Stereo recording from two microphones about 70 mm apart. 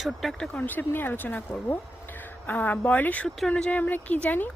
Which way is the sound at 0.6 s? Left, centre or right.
Left.